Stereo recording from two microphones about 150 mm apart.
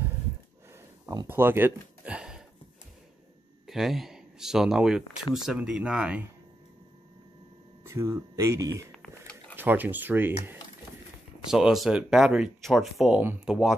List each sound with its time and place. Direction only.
1.0 s a sound: 15° right (ahead or behind)
3.6 s speech: centre (ahead or behind)
7.8 s speech: 20° right (ahead or behind)
8.9 s a sound: 5° left (ahead or behind)
9.6 s speech: 10° right (ahead or behind)
11.5 s speech: centre (ahead or behind)